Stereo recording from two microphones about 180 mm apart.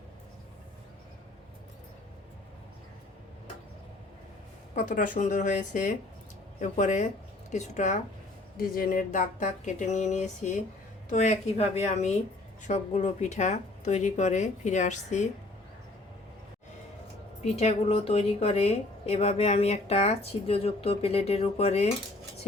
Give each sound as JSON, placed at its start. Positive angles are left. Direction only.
{"t": 4.7, "sound": "a woman's voice", "side_deg": 45}
{"t": 8.5, "sound": "a woman's voice", "side_deg": 55}
{"t": 17.4, "sound": "a woman's voice", "side_deg": 35}